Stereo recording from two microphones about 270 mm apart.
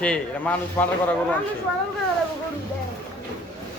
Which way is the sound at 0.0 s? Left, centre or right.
Centre.